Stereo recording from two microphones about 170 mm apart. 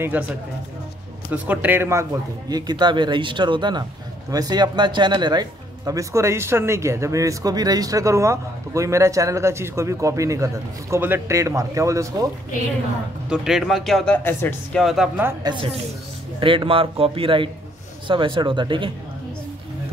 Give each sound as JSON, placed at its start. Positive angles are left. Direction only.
{"t": 0.1, "sound": "a man's voice", "side_deg": -10}
{"t": 1.3, "sound": "a man's voice", "side_deg": -10}
{"t": 2.5, "sound": "speech", "side_deg": -25}
{"t": 13.3, "sound": "speech", "side_deg": -5}
{"t": 14.8, "sound": "speech", "side_deg": 0}
{"t": 15.2, "sound": "a man's voice", "side_deg": -25}